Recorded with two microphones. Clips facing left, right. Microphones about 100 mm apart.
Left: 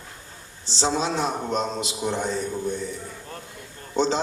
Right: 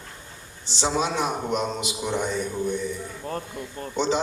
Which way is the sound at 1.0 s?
30° left (ahead or behind).